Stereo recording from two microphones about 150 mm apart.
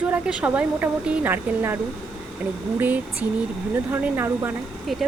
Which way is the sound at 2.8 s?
10° right (ahead or behind).